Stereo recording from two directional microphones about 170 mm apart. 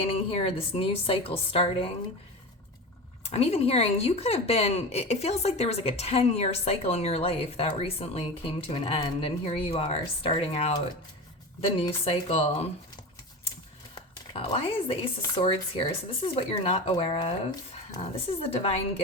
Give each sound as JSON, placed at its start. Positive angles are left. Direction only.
{"t": 0.1, "sound": "speech", "side_deg": 35}
{"t": 3.2, "sound": "speech", "side_deg": 35}
{"t": 13.9, "sound": "a sound", "side_deg": 30}
{"t": 15.4, "sound": "speech", "side_deg": 35}